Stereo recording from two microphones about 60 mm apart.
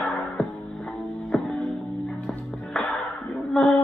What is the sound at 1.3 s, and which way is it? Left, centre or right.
Music, centre.